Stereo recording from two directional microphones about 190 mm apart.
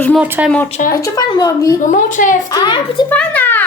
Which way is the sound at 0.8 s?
40° left (ahead or behind).